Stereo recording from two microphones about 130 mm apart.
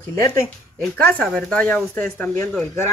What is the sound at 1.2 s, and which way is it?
Speech, 5° left (ahead or behind).